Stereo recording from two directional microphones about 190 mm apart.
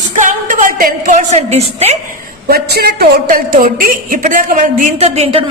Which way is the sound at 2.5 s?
55° right (ahead or behind).